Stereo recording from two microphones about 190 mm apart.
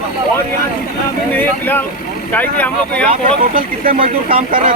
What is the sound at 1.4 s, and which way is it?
Speech, 10° left (ahead or behind).